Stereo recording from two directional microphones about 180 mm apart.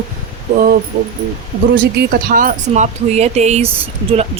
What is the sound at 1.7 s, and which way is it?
Speech, 80° right.